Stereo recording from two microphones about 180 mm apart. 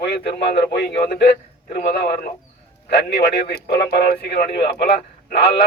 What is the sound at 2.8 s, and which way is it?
Speech, 65° left (ahead or behind).